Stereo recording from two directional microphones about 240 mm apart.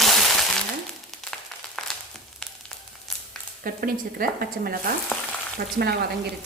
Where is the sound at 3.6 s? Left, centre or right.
Right.